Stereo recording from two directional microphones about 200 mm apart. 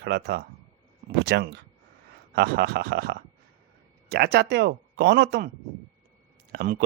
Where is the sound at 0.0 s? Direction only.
55° right (ahead or behind).